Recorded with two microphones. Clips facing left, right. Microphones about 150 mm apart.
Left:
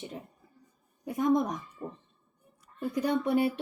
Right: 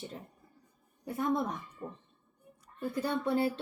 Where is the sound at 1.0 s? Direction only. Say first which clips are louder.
Left 5 dB; 15° left (ahead or behind).